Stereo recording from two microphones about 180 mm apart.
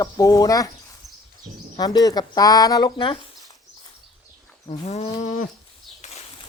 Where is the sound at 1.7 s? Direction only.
20° left (ahead or behind).